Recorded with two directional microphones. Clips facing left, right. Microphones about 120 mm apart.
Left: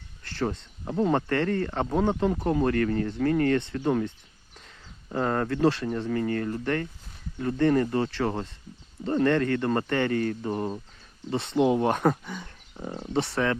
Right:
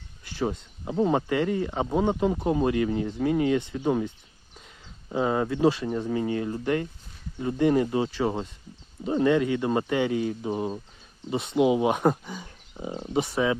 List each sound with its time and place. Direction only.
0.2 s speech: 10° right (ahead or behind)